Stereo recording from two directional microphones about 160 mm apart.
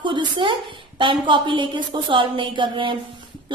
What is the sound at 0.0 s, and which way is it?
A woman's voice, 30° right (ahead or behind).